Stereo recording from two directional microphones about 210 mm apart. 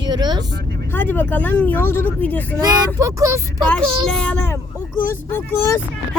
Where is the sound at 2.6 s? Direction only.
15° right (ahead or behind).